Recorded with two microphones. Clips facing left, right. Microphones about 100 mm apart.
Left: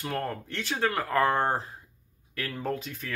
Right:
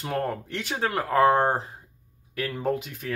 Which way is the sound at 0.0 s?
15° right (ahead or behind).